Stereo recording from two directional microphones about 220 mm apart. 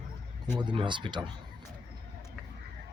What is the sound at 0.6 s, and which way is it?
Speech, 20° right (ahead or behind).